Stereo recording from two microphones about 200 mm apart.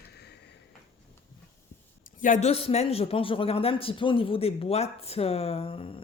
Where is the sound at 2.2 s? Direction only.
35° left (ahead or behind).